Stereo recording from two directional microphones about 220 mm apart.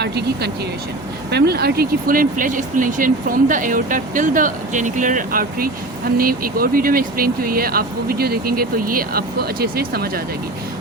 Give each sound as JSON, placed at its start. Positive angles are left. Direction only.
{"t": 0.0, "sound": "speech", "side_deg": -50}